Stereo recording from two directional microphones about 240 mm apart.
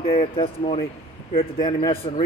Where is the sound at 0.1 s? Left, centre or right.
Left.